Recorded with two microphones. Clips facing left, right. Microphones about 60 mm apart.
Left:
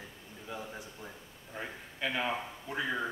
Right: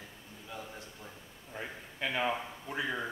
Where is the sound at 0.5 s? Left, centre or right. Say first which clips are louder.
Left 3 dB; centre.